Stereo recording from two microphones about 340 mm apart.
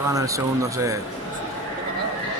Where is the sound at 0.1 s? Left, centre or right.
Centre.